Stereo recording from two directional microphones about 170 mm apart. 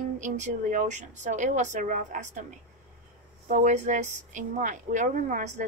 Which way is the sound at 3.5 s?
45° right (ahead or behind).